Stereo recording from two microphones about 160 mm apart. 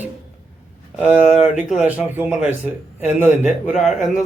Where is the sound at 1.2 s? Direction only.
45° left (ahead or behind).